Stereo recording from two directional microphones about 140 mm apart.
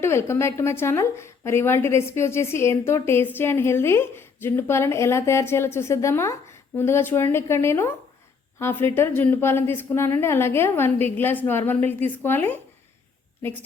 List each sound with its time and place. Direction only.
0.0 s a woman's voice: 20° left (ahead or behind)